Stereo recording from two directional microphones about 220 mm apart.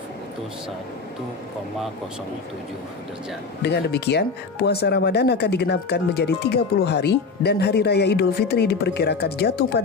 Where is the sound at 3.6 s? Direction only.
50° left (ahead or behind).